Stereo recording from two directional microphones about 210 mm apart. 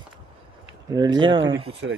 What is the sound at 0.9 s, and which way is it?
Speech, 20° right (ahead or behind).